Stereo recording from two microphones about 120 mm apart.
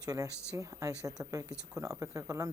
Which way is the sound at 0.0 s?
30° right (ahead or behind).